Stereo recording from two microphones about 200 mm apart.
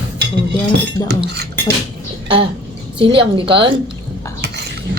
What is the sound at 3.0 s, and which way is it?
Speech, 25° right (ahead or behind).